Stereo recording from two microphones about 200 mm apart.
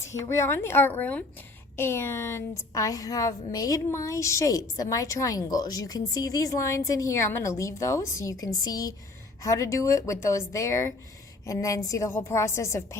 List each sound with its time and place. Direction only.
0.0 s a woman's voice: 15° left (ahead or behind)